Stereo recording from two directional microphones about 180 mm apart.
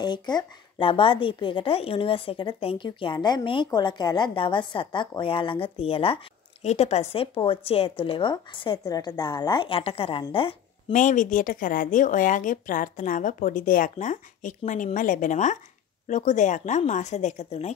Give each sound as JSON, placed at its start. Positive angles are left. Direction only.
{"t": 0.0, "sound": "a woman's voice", "side_deg": 25}
{"t": 10.9, "sound": "a woman's voice", "side_deg": 45}